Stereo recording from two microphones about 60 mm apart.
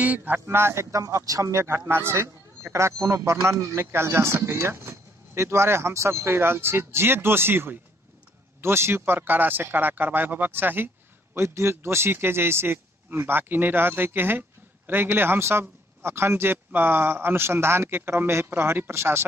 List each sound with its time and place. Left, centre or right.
0.0 s speech: right
0.5 s speech: right
0.9 s a man's voice: right
11.3 s a man's voice: right